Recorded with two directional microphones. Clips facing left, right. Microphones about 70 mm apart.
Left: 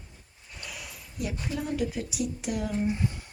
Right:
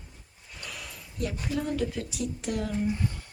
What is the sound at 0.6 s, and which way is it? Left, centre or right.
Speech, centre.